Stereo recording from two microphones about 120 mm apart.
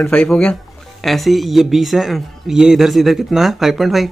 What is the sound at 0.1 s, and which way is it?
A woman's voice, 5° left (ahead or behind).